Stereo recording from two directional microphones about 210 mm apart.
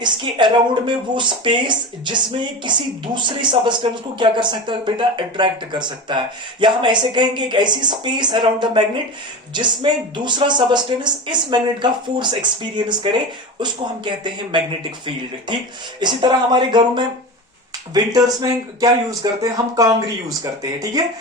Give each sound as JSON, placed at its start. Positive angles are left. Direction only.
{"t": 0.0, "sound": "speech", "side_deg": -20}